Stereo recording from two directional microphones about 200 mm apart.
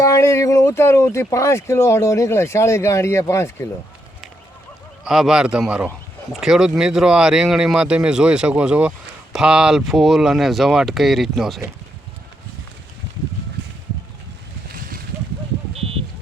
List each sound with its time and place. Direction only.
0.0 s speech: 15° left (ahead or behind)
5.0 s speech: centre (ahead or behind)
14.7 s a sound: 45° right (ahead or behind)